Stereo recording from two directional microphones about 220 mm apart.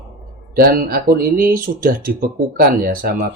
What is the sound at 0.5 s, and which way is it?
Speech, 40° right (ahead or behind).